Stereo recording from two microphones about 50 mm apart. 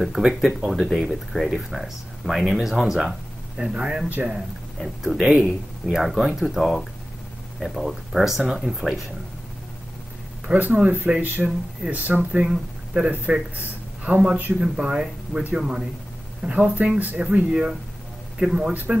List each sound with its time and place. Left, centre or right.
0.0 s speech: centre
3.5 s speech: centre
4.7 s speech: centre
10.4 s speech: right
12.2 s speech: right
16.4 s speech: right
17.5 s speech: centre
18.7 s speech: right